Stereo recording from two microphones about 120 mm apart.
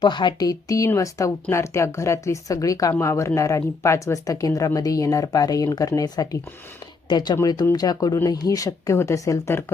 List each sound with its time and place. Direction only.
0.0 s speech: 40° left (ahead or behind)